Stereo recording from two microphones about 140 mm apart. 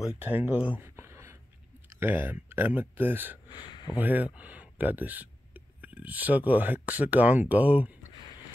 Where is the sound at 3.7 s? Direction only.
30° left (ahead or behind).